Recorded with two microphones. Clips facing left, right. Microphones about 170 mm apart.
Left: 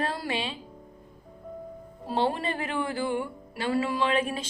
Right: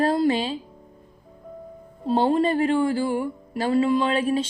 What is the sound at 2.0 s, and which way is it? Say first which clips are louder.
Speech: right 7 dB; 30° right (ahead or behind).